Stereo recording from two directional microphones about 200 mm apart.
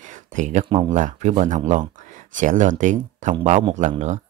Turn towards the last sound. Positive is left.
turn(degrees=-35)  # may be behind; listen again after turning